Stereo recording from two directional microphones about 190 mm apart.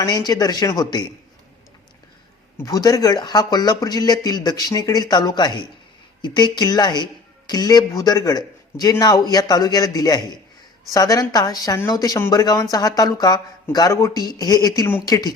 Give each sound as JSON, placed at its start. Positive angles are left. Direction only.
{"t": 0.0, "sound": "a woman's voice", "side_deg": 20}
{"t": 2.6, "sound": "a woman's voice", "side_deg": 20}